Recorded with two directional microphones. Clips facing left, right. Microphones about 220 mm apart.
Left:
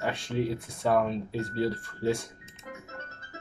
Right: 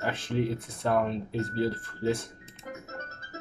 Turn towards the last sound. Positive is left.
turn(degrees=-40)  # may be behind; listen again after turning